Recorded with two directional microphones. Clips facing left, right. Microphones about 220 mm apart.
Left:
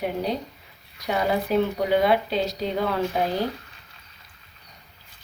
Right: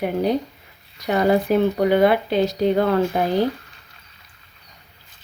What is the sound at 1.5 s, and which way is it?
Speech, 50° right (ahead or behind).